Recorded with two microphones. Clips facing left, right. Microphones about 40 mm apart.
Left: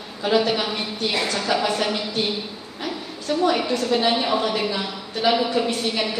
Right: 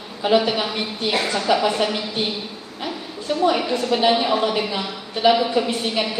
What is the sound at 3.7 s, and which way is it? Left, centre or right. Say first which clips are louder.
A woman's voice: right 2 dB; right.